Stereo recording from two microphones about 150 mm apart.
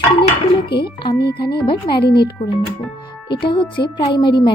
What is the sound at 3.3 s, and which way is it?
Speech, 35° left (ahead or behind).